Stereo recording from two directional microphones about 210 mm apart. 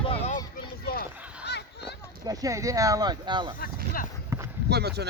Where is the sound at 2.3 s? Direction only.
15° right (ahead or behind).